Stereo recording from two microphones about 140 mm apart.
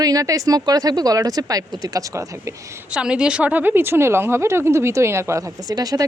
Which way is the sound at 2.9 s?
5° right (ahead or behind).